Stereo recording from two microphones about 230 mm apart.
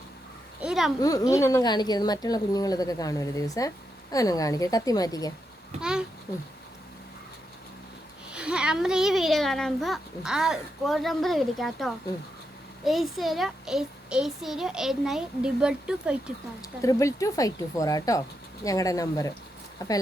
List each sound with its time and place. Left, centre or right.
0.6 s a sound: centre
0.9 s speech: centre
5.8 s a child's voice: centre
8.3 s a child's voice: centre
16.6 s speech: centre